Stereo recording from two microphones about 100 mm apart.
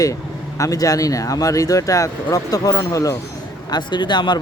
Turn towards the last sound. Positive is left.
turn(degrees=50)  # may be behind; listen again after turning